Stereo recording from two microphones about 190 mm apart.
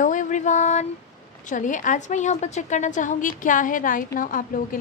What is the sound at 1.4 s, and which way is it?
A woman's voice, 40° left (ahead or behind).